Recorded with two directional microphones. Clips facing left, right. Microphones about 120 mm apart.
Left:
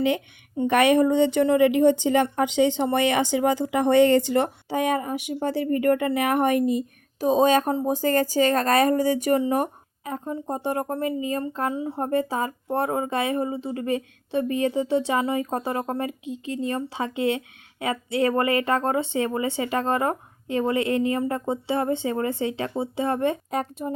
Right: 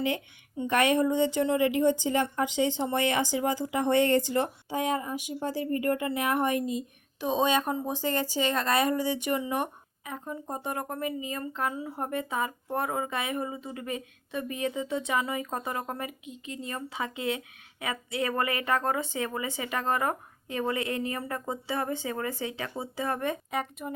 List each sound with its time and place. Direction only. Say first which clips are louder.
0.0 s a woman's voice: left 7 dB; 75° left (ahead or behind); by 6.8 s 60° left (ahead or behind)
7.2 s speech: left 7 dB; 40° left (ahead or behind)